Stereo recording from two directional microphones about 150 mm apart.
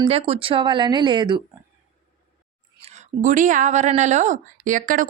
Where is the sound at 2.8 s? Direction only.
50° right (ahead or behind).